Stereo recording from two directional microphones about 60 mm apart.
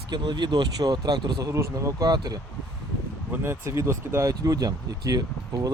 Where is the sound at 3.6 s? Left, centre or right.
Right.